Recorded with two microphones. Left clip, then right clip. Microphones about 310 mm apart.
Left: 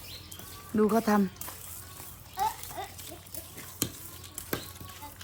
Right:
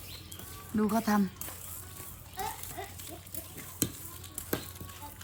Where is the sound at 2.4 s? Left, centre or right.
Centre.